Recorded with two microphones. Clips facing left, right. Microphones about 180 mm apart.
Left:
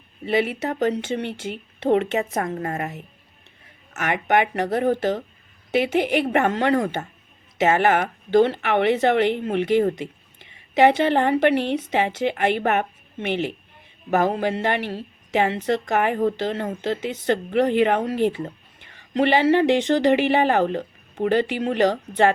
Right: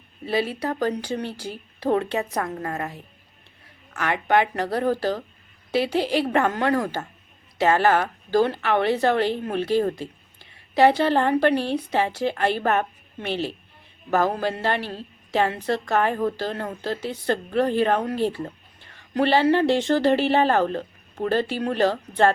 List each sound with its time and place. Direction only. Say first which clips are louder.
0.3 s a woman's voice: left 2 dB; 20° left (ahead or behind)